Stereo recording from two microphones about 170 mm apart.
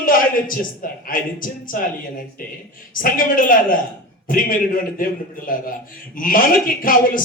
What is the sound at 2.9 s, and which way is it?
A man's voice, 55° left (ahead or behind).